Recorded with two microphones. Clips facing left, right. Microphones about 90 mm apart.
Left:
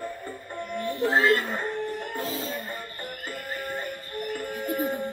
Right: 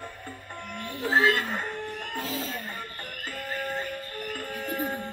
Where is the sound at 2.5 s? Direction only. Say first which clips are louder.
Left 2 dB; 5° left (ahead or behind).